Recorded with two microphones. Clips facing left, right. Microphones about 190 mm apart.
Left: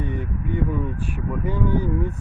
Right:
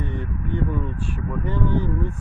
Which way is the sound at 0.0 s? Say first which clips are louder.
Left 1 dB; 15° left (ahead or behind).